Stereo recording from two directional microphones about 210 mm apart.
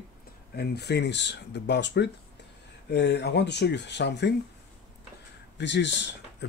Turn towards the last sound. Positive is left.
turn(degrees=55)  # may be behind; listen again after turning